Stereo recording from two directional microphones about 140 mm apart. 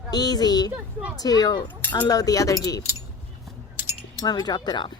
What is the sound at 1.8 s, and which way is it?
Speech, 15° left (ahead or behind).